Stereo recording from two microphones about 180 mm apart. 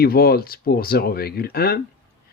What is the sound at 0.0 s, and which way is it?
Speech, 60° left (ahead or behind).